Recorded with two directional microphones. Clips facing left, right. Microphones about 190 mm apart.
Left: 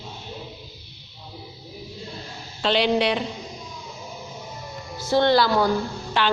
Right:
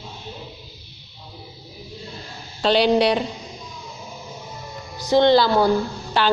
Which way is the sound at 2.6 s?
40° right (ahead or behind).